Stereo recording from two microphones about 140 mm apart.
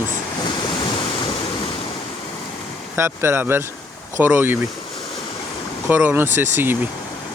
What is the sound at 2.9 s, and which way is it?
Speech, 15° right (ahead or behind).